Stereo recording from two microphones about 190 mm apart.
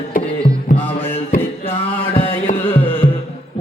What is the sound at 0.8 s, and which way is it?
Mantra, 10° left (ahead or behind).